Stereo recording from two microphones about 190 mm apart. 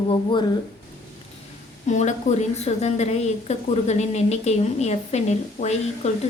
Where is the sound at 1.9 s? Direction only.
40° left (ahead or behind).